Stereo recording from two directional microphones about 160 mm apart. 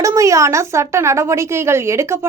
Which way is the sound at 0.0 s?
20° right (ahead or behind).